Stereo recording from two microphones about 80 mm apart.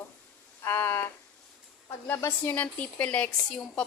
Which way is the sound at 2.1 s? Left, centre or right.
Left.